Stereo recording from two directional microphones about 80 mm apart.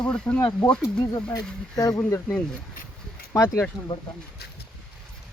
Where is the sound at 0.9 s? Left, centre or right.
Left.